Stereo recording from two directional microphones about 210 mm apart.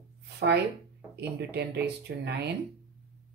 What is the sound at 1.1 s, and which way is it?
A woman's voice, 50° right (ahead or behind).